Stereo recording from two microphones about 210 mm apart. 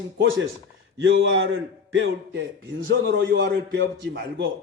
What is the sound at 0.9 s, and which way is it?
A man's voice, 60° right (ahead or behind).